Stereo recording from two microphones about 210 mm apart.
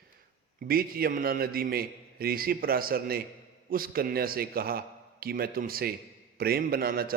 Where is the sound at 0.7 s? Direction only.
45° right (ahead or behind).